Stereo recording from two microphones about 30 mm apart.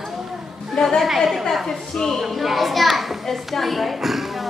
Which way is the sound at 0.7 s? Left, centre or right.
Centre.